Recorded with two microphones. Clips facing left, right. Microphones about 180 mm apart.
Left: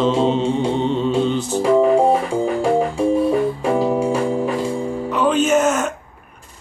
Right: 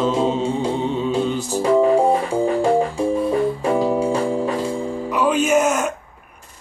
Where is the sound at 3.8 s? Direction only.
15° left (ahead or behind).